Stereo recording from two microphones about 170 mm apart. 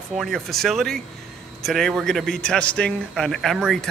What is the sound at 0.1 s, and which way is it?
A man's voice, centre (ahead or behind).